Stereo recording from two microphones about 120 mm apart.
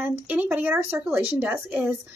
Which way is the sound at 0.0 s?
15° right (ahead or behind).